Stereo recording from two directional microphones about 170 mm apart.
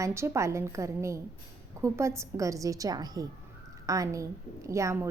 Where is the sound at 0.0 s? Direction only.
15° right (ahead or behind).